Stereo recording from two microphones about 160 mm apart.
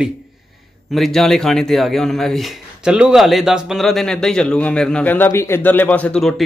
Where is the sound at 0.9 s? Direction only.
Centre (ahead or behind).